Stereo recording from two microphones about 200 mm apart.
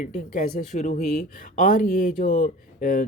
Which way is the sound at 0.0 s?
40° left (ahead or behind).